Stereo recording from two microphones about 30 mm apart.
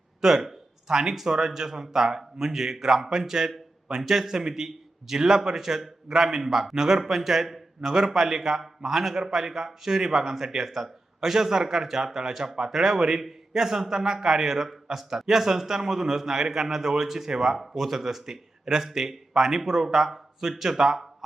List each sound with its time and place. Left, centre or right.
0.2 s a sound: centre
1.3 s a man's voice: centre
7.9 s a man's voice: right
9.1 s a man's voice: right